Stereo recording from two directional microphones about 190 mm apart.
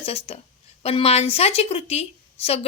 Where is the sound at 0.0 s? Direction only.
30° left (ahead or behind).